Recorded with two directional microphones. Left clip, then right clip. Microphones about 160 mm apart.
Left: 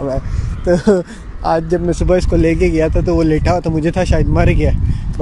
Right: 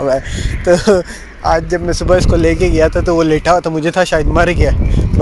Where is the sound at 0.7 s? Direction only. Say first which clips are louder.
Right 3 dB; 15° left (ahead or behind).